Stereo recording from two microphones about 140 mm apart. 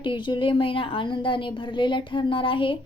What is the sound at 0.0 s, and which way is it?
A woman's voice, 35° left (ahead or behind).